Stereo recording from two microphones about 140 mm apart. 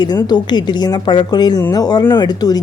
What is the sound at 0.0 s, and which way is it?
A woman's voice, 30° left (ahead or behind).